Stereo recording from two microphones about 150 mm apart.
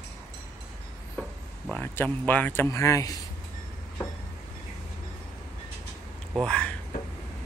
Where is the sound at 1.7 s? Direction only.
10° left (ahead or behind).